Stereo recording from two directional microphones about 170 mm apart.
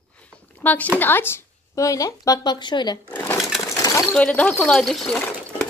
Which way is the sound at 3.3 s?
Centre (ahead or behind).